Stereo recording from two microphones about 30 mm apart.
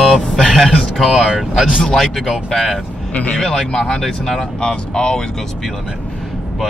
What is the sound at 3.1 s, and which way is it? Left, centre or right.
Speech, left.